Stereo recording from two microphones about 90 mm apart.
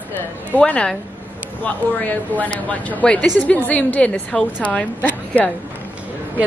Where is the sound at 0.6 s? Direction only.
10° left (ahead or behind).